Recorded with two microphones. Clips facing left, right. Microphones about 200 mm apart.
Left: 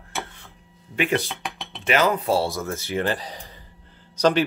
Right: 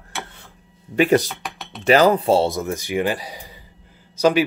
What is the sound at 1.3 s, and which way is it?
Dishes, centre (ahead or behind).